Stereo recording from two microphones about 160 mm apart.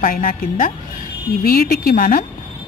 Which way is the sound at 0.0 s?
60° left (ahead or behind).